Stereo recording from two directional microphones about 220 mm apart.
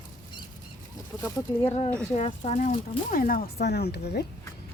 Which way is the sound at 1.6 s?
30° left (ahead or behind).